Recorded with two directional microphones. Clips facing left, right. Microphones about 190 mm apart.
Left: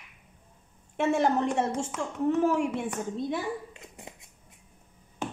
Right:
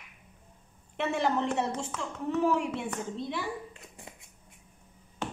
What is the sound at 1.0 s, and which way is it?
A woman's voice, 45° left (ahead or behind).